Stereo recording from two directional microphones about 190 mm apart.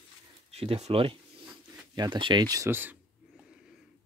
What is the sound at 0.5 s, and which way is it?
Speech, 35° right (ahead or behind).